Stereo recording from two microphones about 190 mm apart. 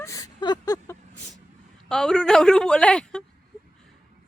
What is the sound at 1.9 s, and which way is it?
A woman's voice, 5° left (ahead or behind).